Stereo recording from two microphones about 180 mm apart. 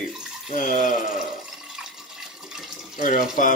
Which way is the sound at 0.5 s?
50° left (ahead or behind).